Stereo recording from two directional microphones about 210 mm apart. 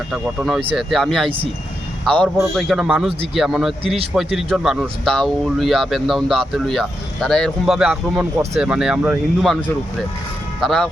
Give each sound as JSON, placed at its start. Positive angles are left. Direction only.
{"t": 0.1, "sound": "speech", "side_deg": 0}
{"t": 3.8, "sound": "a man's voice", "side_deg": -25}
{"t": 4.1, "sound": "speech", "side_deg": 0}